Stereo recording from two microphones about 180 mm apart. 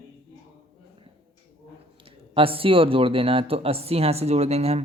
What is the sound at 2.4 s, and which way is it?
Speech, 30° right (ahead or behind).